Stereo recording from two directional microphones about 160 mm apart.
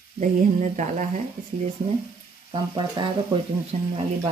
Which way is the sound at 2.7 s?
30° right (ahead or behind).